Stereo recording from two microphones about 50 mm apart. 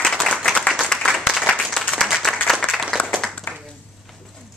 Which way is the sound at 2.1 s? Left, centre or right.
Centre.